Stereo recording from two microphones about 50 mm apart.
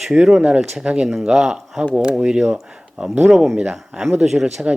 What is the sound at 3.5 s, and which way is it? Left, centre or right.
Speech, right.